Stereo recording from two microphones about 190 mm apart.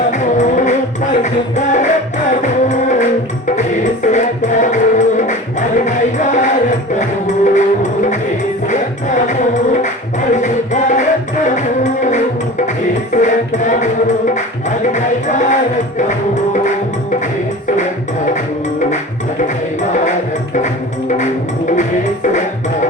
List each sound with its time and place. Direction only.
0.1 s music: 40° left (ahead or behind)
21.7 s music: 40° left (ahead or behind)